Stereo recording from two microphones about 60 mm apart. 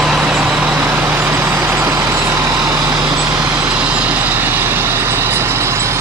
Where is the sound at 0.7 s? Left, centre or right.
Right.